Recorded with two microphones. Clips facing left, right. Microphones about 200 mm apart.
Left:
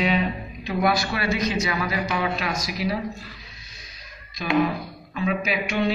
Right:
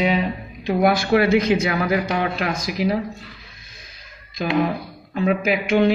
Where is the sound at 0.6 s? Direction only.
50° right (ahead or behind).